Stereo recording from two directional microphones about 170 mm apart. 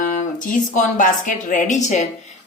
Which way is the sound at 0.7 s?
50° left (ahead or behind).